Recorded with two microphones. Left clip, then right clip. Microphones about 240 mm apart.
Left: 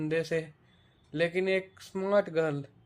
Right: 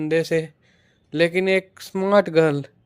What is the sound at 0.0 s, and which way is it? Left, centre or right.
Speech, right.